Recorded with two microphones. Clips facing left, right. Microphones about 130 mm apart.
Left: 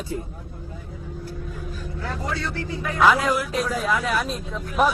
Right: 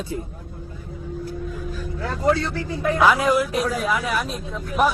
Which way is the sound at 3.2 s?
20° right (ahead or behind).